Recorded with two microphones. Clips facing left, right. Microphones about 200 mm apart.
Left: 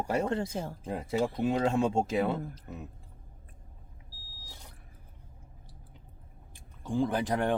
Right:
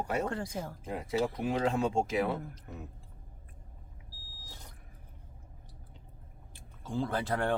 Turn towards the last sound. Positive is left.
turn(degrees=15)  # may be behind; listen again after turning